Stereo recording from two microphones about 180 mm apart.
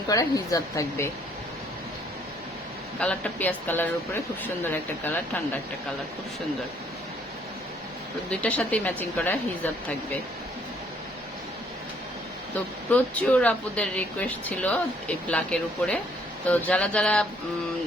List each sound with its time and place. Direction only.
0.1 s speech: 20° left (ahead or behind)
3.0 s speech: 5° left (ahead or behind)
8.3 s speech: 10° left (ahead or behind)
12.5 s speech: 10° left (ahead or behind)